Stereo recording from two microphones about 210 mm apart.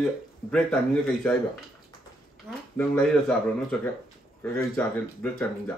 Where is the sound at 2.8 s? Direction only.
5° left (ahead or behind).